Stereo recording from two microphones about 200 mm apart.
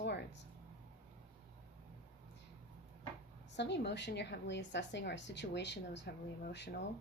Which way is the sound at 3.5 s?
60° left (ahead or behind).